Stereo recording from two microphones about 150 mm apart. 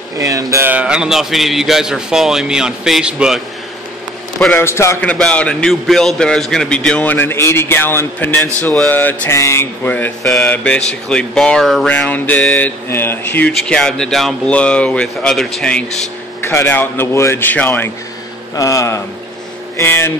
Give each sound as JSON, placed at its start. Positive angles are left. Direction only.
{"t": 0.2, "sound": "a man's voice", "side_deg": -20}
{"t": 4.6, "sound": "a man's voice", "side_deg": 15}
{"t": 16.3, "sound": "a man's voice", "side_deg": 15}